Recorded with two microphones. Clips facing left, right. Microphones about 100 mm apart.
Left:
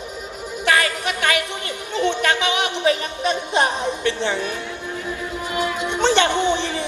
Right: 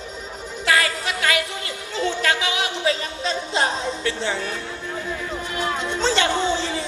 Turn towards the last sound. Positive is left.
turn(degrees=20)  # may be behind; listen again after turning